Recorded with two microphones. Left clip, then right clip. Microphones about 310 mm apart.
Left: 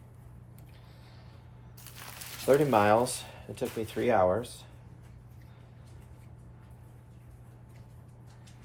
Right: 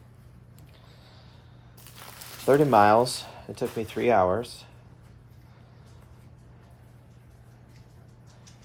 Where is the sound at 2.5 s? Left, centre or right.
Right.